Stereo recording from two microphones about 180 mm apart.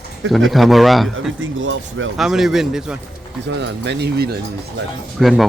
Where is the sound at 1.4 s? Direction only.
90° right.